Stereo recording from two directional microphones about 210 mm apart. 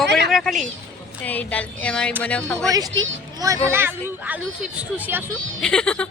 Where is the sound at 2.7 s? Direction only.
20° right (ahead or behind).